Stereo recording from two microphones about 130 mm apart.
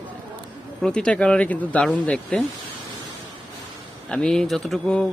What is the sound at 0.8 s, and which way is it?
Speech, 5° left (ahead or behind).